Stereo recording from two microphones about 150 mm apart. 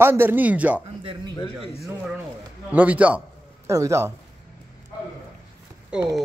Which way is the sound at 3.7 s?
20° right (ahead or behind).